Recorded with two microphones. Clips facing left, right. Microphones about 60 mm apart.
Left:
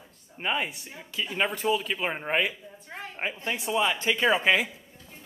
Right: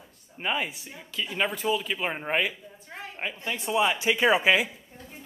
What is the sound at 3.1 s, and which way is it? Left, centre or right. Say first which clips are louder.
Speech: left 2 dB; centre.